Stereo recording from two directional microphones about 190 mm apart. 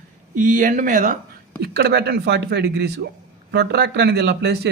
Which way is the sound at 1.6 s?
60° right (ahead or behind).